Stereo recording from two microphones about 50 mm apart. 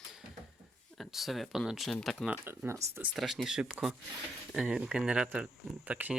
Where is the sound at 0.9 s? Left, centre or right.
Centre.